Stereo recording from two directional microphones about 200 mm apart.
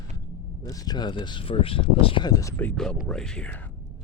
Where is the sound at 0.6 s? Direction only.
20° left (ahead or behind).